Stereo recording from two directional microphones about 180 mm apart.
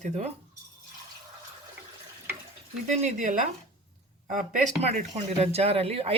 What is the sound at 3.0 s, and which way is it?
Speech, 45° right (ahead or behind).